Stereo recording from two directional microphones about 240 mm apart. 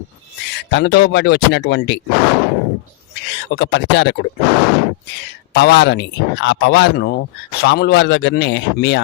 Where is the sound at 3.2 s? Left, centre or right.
Left.